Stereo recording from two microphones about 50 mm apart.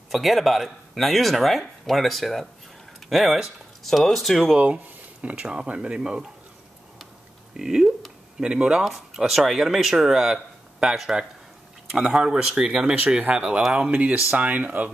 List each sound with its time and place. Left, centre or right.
0.1 s speech: centre
4.6 s a sound: right
5.5 s speech: right
7.5 s speech: centre
13.9 s speech: right